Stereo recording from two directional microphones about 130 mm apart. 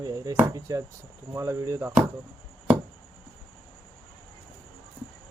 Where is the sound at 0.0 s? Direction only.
25° right (ahead or behind).